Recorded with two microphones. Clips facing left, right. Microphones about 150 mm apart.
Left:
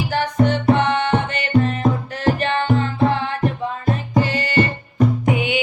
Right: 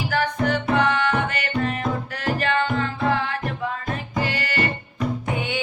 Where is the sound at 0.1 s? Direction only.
20° left (ahead or behind).